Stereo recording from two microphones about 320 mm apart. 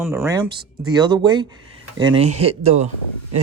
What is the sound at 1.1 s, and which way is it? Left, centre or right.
Speech, centre.